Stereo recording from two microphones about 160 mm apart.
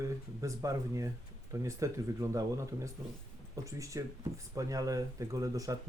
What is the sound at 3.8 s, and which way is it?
Speech, 20° right (ahead or behind).